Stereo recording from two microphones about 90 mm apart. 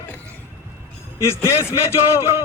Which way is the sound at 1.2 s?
30° left (ahead or behind).